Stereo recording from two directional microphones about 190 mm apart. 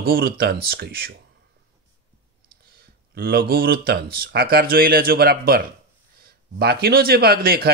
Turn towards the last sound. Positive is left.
turn(degrees=-55)  # may be behind; listen again after turning